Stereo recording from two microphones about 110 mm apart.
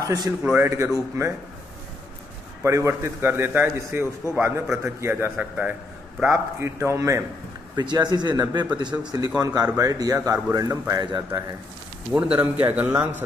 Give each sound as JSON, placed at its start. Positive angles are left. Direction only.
{"t": 0.0, "sound": "a man's voice", "side_deg": -35}
{"t": 2.6, "sound": "a man's voice", "side_deg": -25}
{"t": 6.3, "sound": "a man's voice", "side_deg": -20}
{"t": 7.7, "sound": "speech", "side_deg": -40}
{"t": 11.0, "sound": "speech", "side_deg": -40}
{"t": 12.1, "sound": "a man's voice", "side_deg": -15}